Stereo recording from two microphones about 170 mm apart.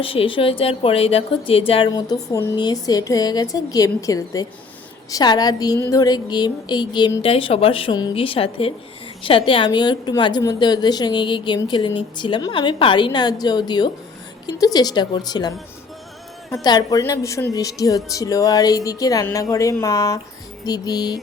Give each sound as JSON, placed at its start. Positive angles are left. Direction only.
{"t": 0.0, "sound": "a woman's voice", "side_deg": 30}
{"t": 16.6, "sound": "a woman's voice", "side_deg": 20}